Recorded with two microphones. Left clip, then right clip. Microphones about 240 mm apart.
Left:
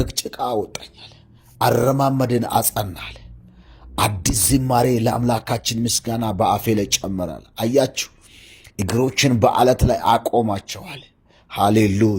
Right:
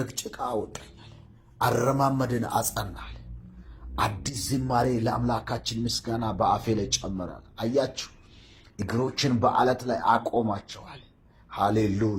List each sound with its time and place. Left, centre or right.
0.0 s speech: left